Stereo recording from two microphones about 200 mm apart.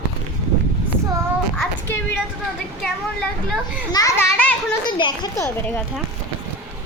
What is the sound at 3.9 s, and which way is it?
A child's voice, 15° left (ahead or behind).